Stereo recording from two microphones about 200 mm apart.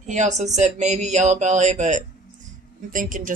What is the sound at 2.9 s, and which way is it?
Speech, 40° right (ahead or behind).